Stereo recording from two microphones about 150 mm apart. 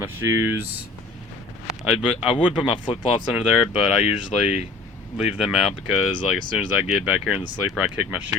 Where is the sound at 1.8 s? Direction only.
5° right (ahead or behind).